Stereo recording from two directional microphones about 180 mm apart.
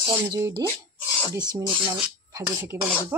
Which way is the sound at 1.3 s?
25° right (ahead or behind).